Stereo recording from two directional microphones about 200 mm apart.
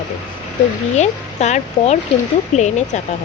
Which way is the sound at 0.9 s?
35° left (ahead or behind).